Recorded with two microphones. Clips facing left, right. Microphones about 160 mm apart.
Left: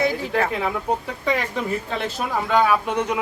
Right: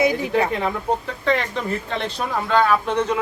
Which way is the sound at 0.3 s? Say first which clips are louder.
Right 2 dB; centre (ahead or behind).